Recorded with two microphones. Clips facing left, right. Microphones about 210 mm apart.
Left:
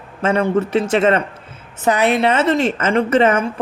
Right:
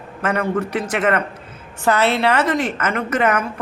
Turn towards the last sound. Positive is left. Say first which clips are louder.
# left 5 dB
turn(degrees=25)  # may be behind; listen again after turning